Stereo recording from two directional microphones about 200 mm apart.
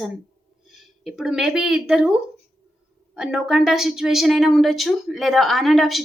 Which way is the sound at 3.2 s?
Centre (ahead or behind).